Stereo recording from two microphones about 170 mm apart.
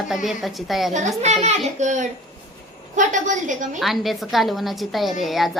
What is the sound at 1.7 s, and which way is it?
A woman's voice, 45° right (ahead or behind).